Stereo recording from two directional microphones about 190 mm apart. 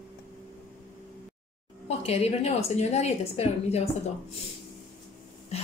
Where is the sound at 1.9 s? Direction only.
30° left (ahead or behind).